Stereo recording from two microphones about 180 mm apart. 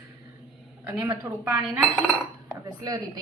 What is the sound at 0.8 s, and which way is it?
A woman's voice, 15° right (ahead or behind).